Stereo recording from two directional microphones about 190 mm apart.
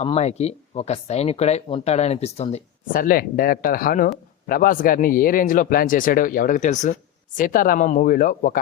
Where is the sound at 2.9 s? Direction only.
50° left (ahead or behind).